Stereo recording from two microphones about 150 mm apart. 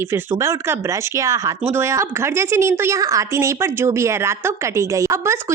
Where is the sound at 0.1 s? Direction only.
20° right (ahead or behind).